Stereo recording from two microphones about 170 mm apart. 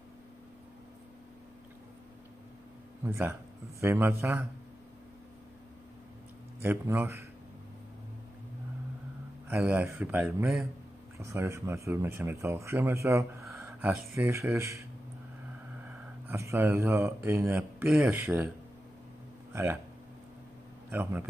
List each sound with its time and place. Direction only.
3.0 s speech: 15° right (ahead or behind)
6.6 s speech: 15° right (ahead or behind)
9.5 s speech: 10° right (ahead or behind)
11.1 s speech: 15° right (ahead or behind)
16.3 s speech: 15° right (ahead or behind)
19.5 s speech: 15° right (ahead or behind)
20.9 s speech: 10° right (ahead or behind)